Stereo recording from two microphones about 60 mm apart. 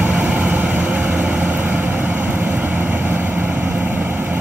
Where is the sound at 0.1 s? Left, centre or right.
Centre.